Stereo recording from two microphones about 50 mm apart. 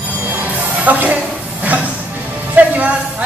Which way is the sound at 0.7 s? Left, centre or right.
Right.